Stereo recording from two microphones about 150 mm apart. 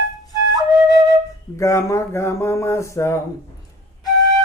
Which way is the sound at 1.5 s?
20° left (ahead or behind).